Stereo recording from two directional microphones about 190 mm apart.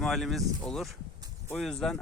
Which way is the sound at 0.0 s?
Centre (ahead or behind).